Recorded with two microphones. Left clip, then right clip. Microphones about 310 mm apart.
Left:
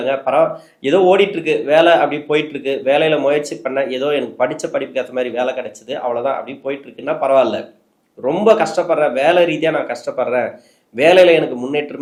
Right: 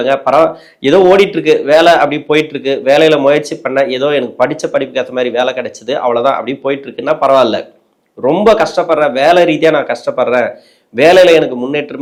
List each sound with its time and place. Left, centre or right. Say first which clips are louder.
0.0 s speech: right 6 dB; right